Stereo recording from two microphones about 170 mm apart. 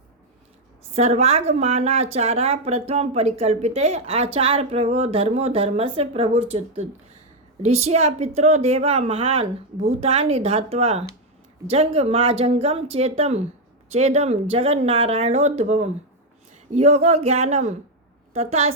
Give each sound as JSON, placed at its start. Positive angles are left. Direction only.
{"t": 0.9, "sound": "a woman's voice", "side_deg": -40}